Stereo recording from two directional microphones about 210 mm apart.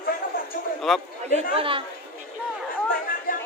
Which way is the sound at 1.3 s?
25° right (ahead or behind).